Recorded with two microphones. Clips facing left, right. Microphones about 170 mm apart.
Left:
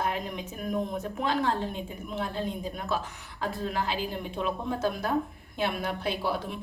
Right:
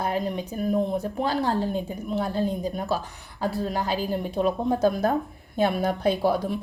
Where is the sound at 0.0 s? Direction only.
35° right (ahead or behind).